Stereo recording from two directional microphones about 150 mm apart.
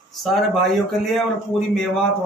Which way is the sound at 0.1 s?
Centre (ahead or behind).